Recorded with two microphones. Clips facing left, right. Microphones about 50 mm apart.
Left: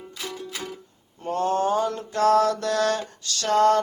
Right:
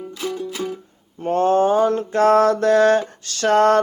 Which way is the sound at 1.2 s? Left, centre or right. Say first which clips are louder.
Right 7 dB; right.